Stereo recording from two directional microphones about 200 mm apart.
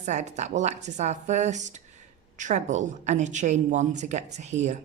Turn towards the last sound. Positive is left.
turn(degrees=-35)  # may be behind; listen again after turning